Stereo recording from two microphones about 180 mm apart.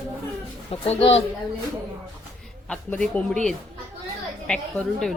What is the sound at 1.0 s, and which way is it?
Speech, 35° left (ahead or behind).